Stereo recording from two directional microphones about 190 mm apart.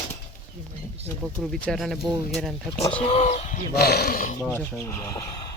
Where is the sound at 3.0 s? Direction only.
30° left (ahead or behind).